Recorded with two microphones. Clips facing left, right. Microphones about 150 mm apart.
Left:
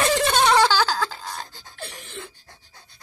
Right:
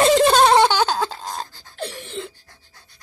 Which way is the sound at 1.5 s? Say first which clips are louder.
Left 2 dB; 20° left (ahead or behind).